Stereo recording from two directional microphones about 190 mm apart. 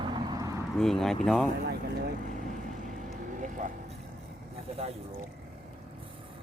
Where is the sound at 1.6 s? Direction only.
55° right (ahead or behind).